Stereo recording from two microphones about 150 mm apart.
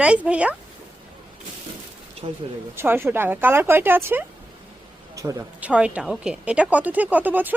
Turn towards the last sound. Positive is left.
turn(degrees=-10)  # may be behind; listen again after turning